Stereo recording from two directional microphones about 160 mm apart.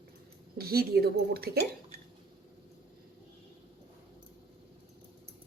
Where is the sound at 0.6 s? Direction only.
75° right (ahead or behind).